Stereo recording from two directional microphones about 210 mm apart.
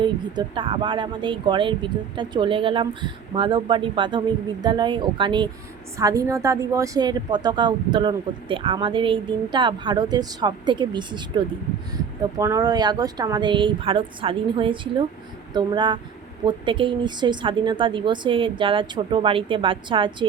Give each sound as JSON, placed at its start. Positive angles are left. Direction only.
{"t": 0.0, "sound": "speech", "side_deg": -25}